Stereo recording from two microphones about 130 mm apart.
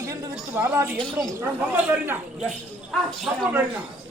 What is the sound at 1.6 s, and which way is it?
Speech, 15° right (ahead or behind).